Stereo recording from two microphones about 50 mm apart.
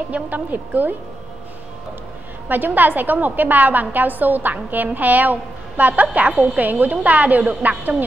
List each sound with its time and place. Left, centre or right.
0.1 s a woman's voice: right
2.4 s a woman's voice: right
6.6 s a woman's voice: right